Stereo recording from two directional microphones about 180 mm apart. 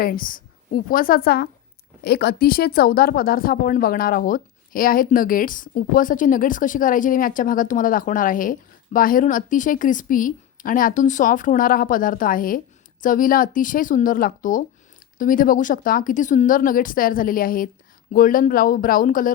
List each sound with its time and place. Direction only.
0.0 s speech: 50° left (ahead or behind)